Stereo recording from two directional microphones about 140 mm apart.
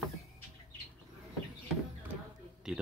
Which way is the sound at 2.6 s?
5° right (ahead or behind).